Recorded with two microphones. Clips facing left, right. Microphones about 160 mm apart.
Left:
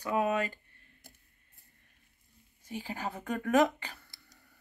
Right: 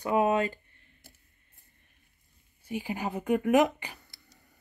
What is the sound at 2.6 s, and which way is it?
Speech, 15° right (ahead or behind).